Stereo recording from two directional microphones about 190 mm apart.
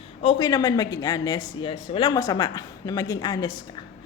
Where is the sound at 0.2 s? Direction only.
30° left (ahead or behind).